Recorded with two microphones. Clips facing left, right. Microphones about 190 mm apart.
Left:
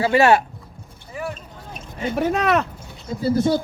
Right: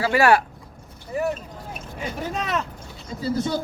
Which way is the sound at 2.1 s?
65° left (ahead or behind).